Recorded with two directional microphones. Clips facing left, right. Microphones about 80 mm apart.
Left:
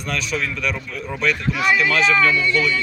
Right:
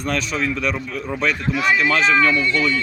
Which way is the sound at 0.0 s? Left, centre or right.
Right.